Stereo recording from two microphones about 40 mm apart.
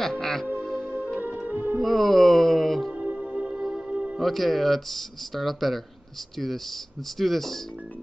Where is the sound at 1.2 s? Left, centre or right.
Right.